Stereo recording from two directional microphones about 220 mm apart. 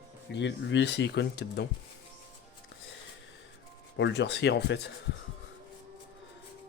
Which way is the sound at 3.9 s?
55° left (ahead or behind).